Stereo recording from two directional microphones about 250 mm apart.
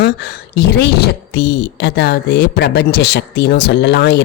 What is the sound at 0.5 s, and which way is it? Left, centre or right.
A woman's voice, left.